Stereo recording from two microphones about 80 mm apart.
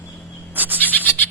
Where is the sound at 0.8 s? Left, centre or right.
Left.